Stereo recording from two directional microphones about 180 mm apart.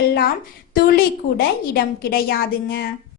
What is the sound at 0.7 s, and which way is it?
A woman's voice, 55° left (ahead or behind).